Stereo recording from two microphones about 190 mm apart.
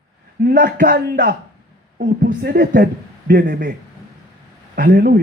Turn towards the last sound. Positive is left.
turn(degrees=-55)  # may be behind; listen again after turning